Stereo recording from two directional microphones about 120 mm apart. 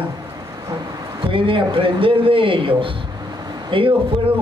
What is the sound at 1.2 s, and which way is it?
A man's voice, 45° right (ahead or behind).